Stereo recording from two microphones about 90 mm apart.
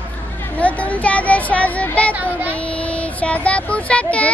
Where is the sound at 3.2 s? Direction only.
15° left (ahead or behind).